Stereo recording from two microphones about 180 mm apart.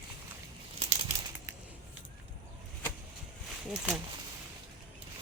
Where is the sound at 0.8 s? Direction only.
35° right (ahead or behind).